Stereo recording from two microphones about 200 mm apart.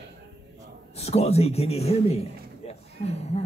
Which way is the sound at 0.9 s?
30° left (ahead or behind).